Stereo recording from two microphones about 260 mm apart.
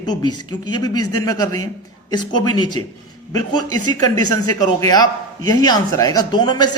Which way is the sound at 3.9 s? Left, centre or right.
Centre.